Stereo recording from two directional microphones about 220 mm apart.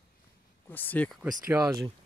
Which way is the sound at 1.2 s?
5° right (ahead or behind).